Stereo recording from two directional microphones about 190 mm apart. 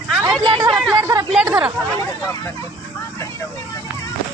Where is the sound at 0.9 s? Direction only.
20° right (ahead or behind).